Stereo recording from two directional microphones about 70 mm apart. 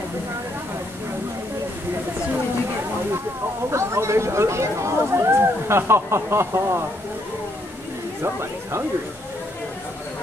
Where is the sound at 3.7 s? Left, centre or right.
Right.